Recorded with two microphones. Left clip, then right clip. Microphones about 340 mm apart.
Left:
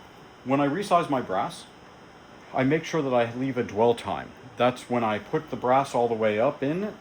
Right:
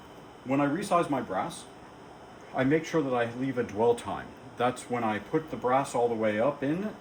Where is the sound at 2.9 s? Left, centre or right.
Left.